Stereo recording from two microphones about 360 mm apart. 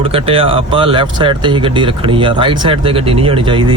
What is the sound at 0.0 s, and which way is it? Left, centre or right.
Speech, centre.